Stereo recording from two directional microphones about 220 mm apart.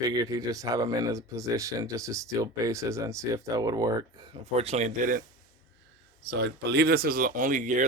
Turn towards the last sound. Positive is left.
turn(degrees=-35)  # may be behind; listen again after turning